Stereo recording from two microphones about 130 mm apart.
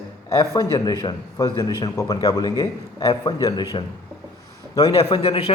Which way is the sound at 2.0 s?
25° left (ahead or behind).